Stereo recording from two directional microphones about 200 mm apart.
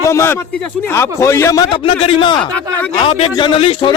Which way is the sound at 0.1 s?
15° left (ahead or behind).